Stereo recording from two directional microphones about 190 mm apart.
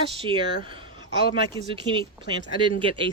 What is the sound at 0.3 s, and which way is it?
Speech, 25° right (ahead or behind).